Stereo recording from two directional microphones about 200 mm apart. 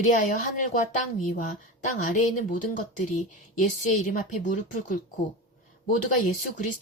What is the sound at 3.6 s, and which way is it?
A woman's voice, 40° left (ahead or behind).